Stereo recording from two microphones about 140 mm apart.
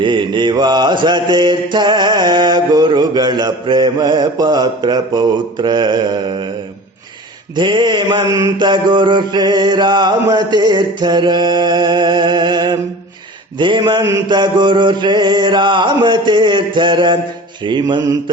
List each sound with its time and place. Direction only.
0.0 s mantra: 35° right (ahead or behind)
7.5 s mantra: 35° right (ahead or behind)